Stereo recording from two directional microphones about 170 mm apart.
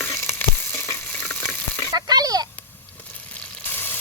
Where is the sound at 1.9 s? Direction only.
20° right (ahead or behind).